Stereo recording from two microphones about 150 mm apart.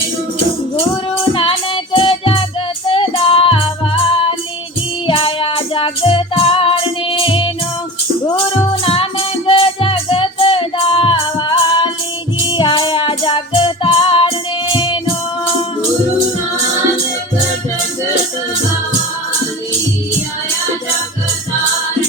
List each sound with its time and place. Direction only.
1.3 s music: 35° left (ahead or behind)
8.8 s music: 35° left (ahead or behind)